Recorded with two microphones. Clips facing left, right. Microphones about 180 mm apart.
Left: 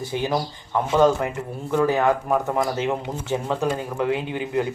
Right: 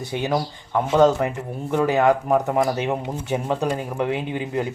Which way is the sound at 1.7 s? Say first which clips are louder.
Right 1 dB; 20° right (ahead or behind).